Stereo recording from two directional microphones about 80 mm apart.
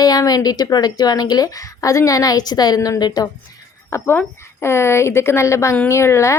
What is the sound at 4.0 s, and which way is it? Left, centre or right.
A woman's voice, left.